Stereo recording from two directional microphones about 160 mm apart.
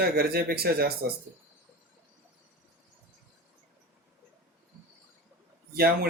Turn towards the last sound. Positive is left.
turn(degrees=-80)